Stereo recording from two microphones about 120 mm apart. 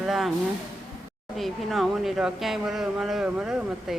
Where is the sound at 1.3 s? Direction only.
Centre (ahead or behind).